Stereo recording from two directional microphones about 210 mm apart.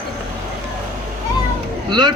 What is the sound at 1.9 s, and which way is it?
Speech, 20° right (ahead or behind).